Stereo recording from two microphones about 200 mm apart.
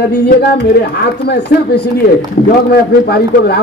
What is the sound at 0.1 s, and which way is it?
A man's voice, 55° left (ahead or behind).